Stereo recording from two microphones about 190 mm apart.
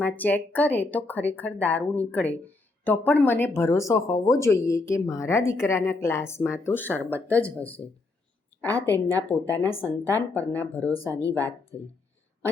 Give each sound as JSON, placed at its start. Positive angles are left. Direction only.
{"t": 0.0, "sound": "a woman's voice", "side_deg": 10}
{"t": 11.1, "sound": "speech", "side_deg": -15}
{"t": 11.7, "sound": "a woman's voice", "side_deg": 15}